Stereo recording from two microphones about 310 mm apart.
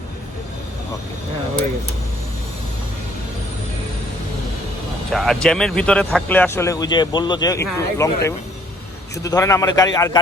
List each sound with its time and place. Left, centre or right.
5.1 s speech: centre